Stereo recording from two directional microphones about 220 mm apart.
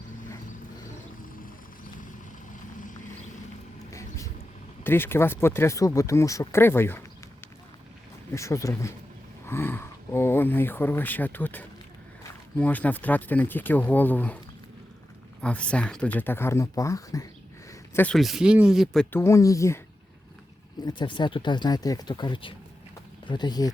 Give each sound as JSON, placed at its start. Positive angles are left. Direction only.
{"t": 4.8, "sound": "speech", "side_deg": 10}
{"t": 8.3, "sound": "speech", "side_deg": 15}
{"t": 15.4, "sound": "speech", "side_deg": 5}
{"t": 19.1, "sound": "speech", "side_deg": 10}
{"t": 20.8, "sound": "speech", "side_deg": 20}